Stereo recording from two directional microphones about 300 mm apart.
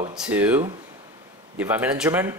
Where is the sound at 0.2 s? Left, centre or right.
Centre.